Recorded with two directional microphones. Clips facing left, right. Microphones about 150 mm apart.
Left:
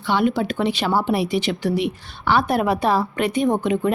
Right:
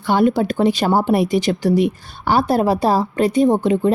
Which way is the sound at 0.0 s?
45° right (ahead or behind).